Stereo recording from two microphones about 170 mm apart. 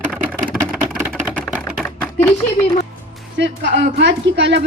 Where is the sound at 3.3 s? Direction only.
90° right.